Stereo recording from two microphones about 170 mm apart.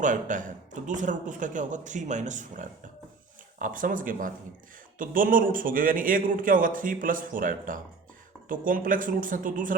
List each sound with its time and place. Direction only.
0.0 s speech: 50° right (ahead or behind)